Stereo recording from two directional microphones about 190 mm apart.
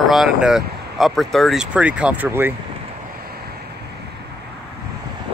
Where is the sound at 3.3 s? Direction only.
55° right (ahead or behind).